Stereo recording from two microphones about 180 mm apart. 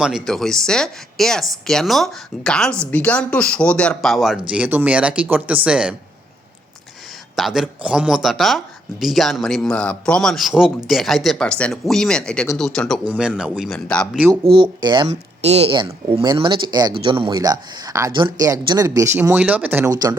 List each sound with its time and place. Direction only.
0.0 s speech: centre (ahead or behind)
7.3 s speech: centre (ahead or behind)
14.4 s speech: 30° right (ahead or behind)
15.0 s speech: 35° right (ahead or behind); by 20.1 s 20° right (ahead or behind)